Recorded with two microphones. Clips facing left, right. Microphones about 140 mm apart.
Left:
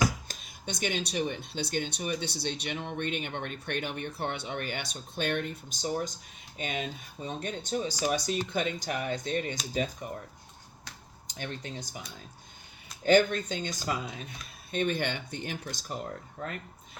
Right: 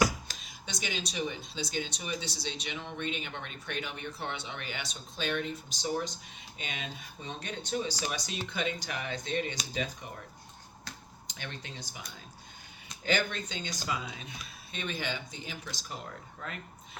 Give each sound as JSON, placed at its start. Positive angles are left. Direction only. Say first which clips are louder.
{"t": 0.3, "sound": "speech", "louder": "left 5 dB", "side_deg": 50}
{"t": 11.3, "sound": "speech", "louder": "left 5 dB", "side_deg": 45}
{"t": 13.1, "sound": "speech", "louder": "left 9 dB", "side_deg": 45}
{"t": 15.6, "sound": "speech", "louder": "left 5 dB", "side_deg": 45}